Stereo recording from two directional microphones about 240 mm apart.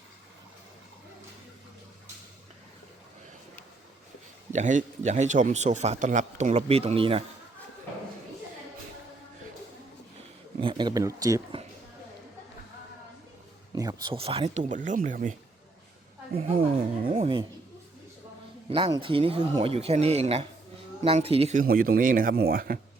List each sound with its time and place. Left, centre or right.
4.5 s a man's voice: right
10.6 s speech: centre
13.7 s a man's voice: centre; by 15.4 s right
16.4 s a man's voice: right
18.7 s a man's voice: right